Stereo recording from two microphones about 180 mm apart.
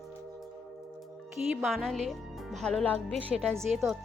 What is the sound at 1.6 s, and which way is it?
Speech, centre (ahead or behind).